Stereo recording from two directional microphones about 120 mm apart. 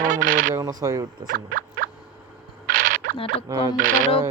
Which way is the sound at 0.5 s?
25° right (ahead or behind).